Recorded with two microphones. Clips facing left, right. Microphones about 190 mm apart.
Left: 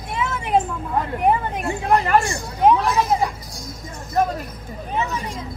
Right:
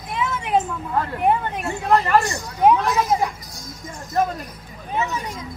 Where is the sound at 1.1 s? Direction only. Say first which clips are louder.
Left 1 dB; 5° left (ahead or behind).